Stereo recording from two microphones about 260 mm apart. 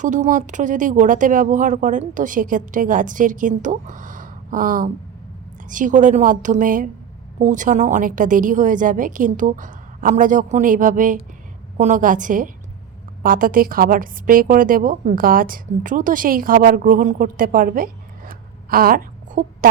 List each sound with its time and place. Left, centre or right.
0.0 s a woman's voice: right